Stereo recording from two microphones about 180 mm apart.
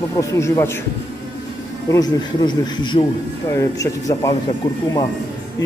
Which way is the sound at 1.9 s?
20° left (ahead or behind).